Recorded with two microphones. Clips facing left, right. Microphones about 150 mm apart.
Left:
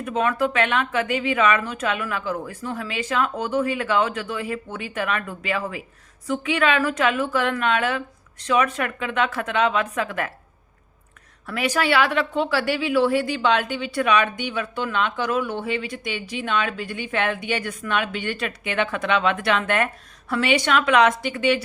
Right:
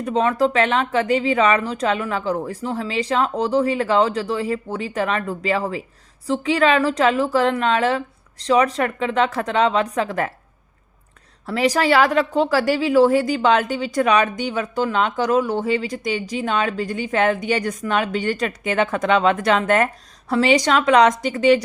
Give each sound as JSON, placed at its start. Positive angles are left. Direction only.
{"t": 0.0, "sound": "speech", "side_deg": -30}
{"t": 11.4, "sound": "speech", "side_deg": -35}